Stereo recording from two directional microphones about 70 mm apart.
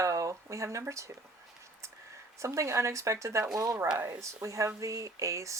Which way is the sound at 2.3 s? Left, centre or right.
Right.